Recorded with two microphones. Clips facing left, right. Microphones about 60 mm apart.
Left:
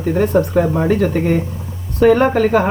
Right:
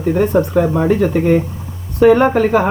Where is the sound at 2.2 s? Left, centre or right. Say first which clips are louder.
Right 1 dB; centre.